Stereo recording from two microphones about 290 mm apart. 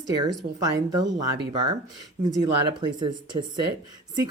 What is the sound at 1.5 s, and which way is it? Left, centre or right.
Speech, centre.